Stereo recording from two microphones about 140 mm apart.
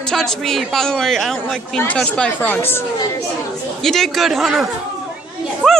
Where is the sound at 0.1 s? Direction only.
5° left (ahead or behind).